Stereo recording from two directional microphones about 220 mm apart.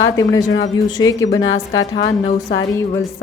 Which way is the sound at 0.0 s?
15° left (ahead or behind).